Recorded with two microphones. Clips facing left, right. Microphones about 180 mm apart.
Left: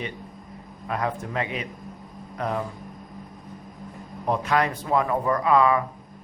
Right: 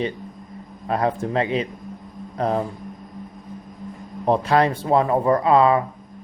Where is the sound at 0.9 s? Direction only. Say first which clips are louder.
Right 6 dB; 30° right (ahead or behind).